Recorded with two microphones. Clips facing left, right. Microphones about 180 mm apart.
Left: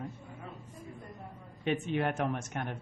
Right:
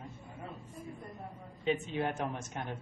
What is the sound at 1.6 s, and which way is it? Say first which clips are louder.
A woman's voice: left 2 dB; 65° left (ahead or behind).